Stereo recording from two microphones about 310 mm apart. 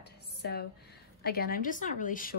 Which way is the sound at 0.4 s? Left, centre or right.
Left.